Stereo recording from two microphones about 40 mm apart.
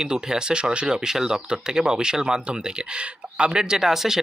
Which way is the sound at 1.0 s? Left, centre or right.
Centre.